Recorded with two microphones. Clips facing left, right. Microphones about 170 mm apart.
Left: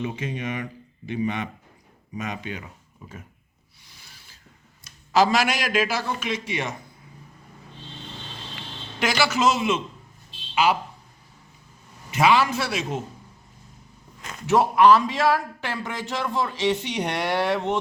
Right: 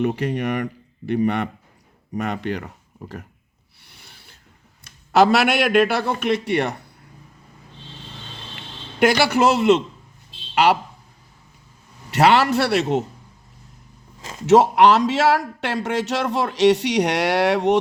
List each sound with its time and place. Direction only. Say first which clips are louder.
0.0 s a man's voice: right 8 dB; 65° right (ahead or behind)
3.8 s a sound: right 3 dB; 60° right (ahead or behind)
4.8 s a man's voice: right 4 dB; 60° right (ahead or behind)
9.0 s a man's voice: right 6 dB; 55° right (ahead or behind)
12.1 s a man's voice: right 4 dB; 70° right (ahead or behind)
14.2 s a sound: right 3 dB; 25° right (ahead or behind)
14.4 s a man's voice: right 4 dB; 75° right (ahead or behind)